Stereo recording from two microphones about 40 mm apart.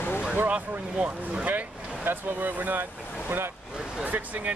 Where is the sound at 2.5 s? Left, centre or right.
Right.